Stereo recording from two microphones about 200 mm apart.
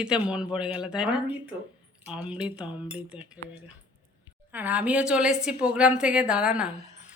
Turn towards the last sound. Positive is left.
turn(degrees=-5)  # may be behind; listen again after turning